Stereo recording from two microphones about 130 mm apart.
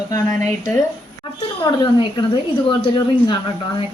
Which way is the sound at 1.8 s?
40° left (ahead or behind).